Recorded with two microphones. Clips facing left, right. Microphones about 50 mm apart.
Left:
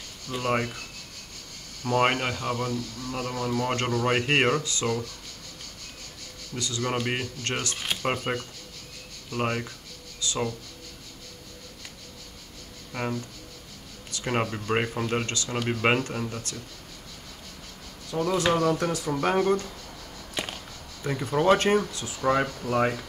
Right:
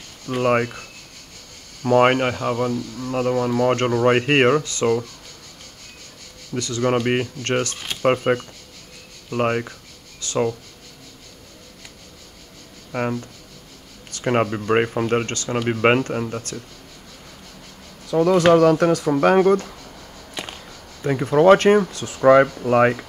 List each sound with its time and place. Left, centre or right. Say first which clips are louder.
0.3 s speech: right 8 dB; right
6.8 s speech: right 9 dB; right
10.2 s speech: right 1 dB; right
12.9 s speech: right 7 dB; right
14.2 s speech: right 8 dB; right
15.2 s speech: right 4 dB; right
15.5 s speech: right 7 dB; right
18.1 s speech: right 10 dB; right
19.1 s speech: right 7 dB; right
20.4 s a sound: even; centre
21.0 s speech: right 9 dB; right
21.8 s speech: right 11 dB; right